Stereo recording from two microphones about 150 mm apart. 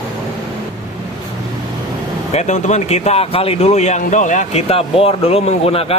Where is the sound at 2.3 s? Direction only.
50° left (ahead or behind).